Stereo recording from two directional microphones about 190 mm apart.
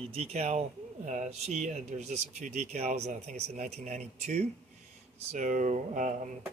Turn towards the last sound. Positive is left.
turn(degrees=-40)  # may be behind; listen again after turning